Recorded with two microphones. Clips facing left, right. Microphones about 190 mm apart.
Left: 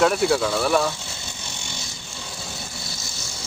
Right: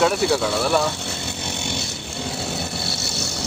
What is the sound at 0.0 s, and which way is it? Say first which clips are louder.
Speech: even; centre (ahead or behind).